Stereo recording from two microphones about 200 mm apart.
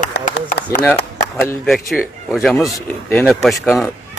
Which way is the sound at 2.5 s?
10° left (ahead or behind).